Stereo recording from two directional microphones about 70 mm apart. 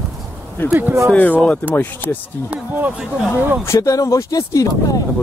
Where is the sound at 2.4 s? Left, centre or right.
Centre.